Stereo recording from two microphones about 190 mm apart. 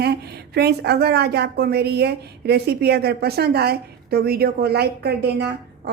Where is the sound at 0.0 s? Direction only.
60° right (ahead or behind).